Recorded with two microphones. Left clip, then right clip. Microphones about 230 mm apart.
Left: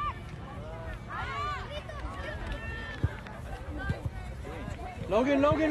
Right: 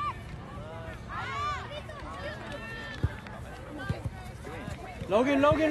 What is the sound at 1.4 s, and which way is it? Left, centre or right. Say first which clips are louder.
Hubbub: right 3 dB; right.